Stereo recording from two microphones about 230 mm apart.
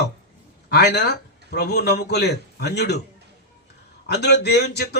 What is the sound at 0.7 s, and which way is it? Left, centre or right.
Speech, left.